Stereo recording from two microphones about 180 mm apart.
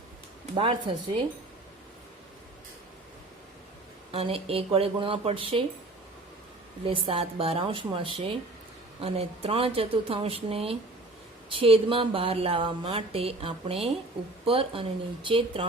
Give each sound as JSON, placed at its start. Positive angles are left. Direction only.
{"t": 0.5, "sound": "speech", "side_deg": -30}
{"t": 4.1, "sound": "speech", "side_deg": -30}
{"t": 6.8, "sound": "speech", "side_deg": -30}